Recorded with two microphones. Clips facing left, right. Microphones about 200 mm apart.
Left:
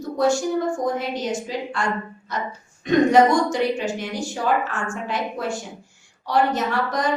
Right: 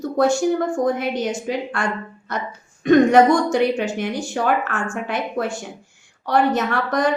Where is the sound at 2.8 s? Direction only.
60° right (ahead or behind).